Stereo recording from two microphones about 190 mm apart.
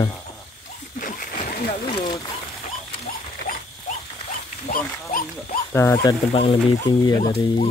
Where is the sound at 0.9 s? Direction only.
45° left (ahead or behind).